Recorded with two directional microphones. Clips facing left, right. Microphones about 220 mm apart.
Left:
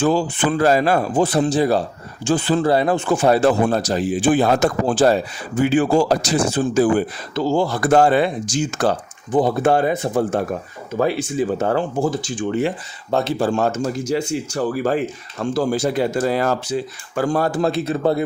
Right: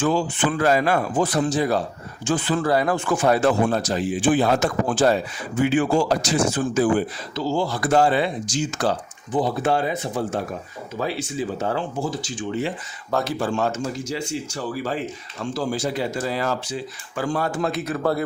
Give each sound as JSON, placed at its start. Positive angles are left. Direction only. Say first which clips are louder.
{"t": 0.0, "sound": "speech", "louder": "left 3 dB", "side_deg": 35}
{"t": 7.3, "sound": "speech", "louder": "left 5 dB", "side_deg": 50}
{"t": 13.1, "sound": "speech", "louder": "left 4 dB", "side_deg": 25}
{"t": 17.2, "sound": "speech", "louder": "left 5 dB", "side_deg": 40}